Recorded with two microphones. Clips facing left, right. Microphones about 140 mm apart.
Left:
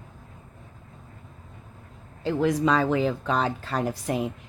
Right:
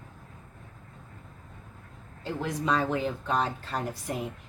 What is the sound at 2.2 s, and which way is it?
Speech, 90° left.